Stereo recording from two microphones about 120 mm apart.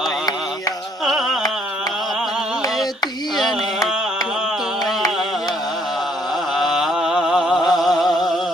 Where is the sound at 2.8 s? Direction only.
35° left (ahead or behind).